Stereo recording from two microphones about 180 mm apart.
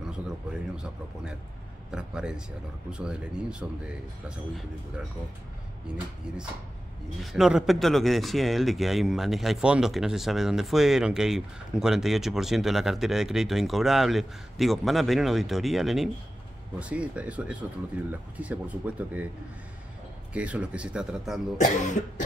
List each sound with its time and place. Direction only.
0.7 s a man's voice: 5° right (ahead or behind)
5.9 s a man's voice: 5° right (ahead or behind)
7.2 s a man's voice: 5° right (ahead or behind)
20.3 s a man's voice: 5° right (ahead or behind)
21.5 s speech: 45° left (ahead or behind)